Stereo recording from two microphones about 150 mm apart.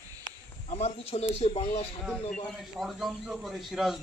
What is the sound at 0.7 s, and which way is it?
A man's voice, 45° left (ahead or behind).